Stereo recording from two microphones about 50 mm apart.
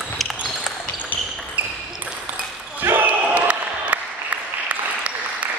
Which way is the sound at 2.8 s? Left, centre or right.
Right.